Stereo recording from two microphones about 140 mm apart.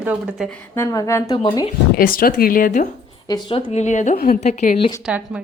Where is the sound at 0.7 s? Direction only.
20° left (ahead or behind).